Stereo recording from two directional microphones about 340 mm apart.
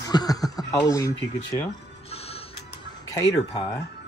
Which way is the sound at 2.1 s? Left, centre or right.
Centre.